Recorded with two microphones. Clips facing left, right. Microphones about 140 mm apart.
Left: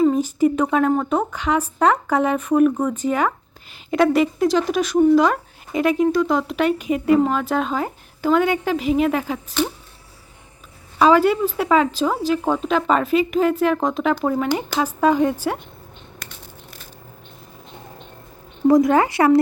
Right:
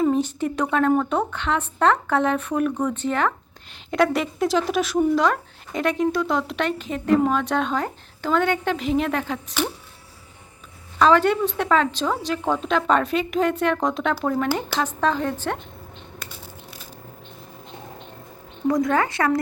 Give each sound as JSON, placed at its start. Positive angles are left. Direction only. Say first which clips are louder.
{"t": 0.0, "sound": "a woman's voice", "louder": "left 4 dB", "side_deg": 5}
{"t": 10.9, "sound": "a woman's voice", "louder": "left 2 dB", "side_deg": 10}
{"t": 14.3, "sound": "speech", "louder": "left 2 dB", "side_deg": 15}
{"t": 18.7, "sound": "speech", "louder": "left 6 dB", "side_deg": 20}